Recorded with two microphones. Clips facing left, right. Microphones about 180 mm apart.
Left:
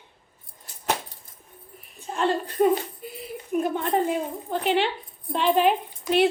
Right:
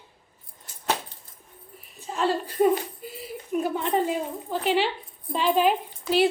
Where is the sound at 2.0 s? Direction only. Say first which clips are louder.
Left 1 dB; 5° right (ahead or behind).